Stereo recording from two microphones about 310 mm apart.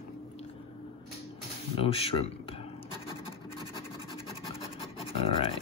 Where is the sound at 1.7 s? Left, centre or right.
Centre.